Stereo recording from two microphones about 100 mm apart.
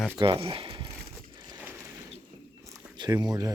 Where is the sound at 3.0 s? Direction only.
45° right (ahead or behind).